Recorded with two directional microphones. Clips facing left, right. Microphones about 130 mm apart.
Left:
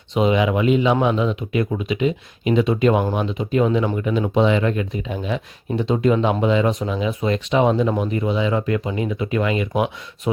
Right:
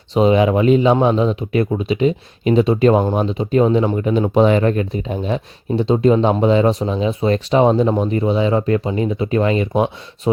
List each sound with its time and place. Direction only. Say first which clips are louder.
0.1 s speech: right 4 dB; 35° right (ahead or behind)